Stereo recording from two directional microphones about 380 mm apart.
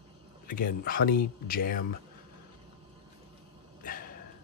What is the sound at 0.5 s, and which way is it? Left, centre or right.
Speech, left.